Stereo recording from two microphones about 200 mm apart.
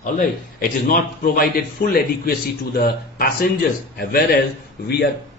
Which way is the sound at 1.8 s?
40° left (ahead or behind).